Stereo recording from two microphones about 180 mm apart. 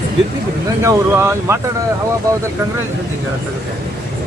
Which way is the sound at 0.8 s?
15° right (ahead or behind).